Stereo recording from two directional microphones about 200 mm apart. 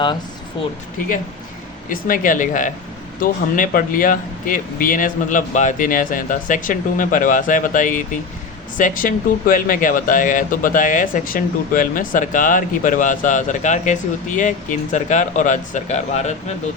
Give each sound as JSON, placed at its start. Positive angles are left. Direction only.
{"t": 1.9, "sound": "speech", "side_deg": 45}